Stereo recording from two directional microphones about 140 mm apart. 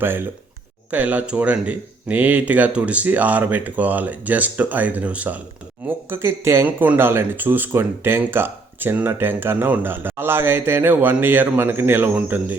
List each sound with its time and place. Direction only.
0.0 s speech: 15° right (ahead or behind)